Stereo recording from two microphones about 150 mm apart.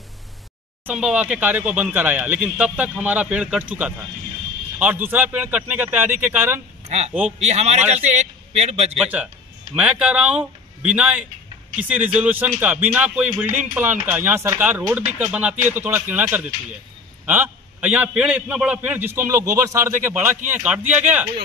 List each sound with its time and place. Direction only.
0.8 s a man's voice: 5° right (ahead or behind)
6.9 s a man's voice: 45° right (ahead or behind)
9.0 s a man's voice: 10° right (ahead or behind)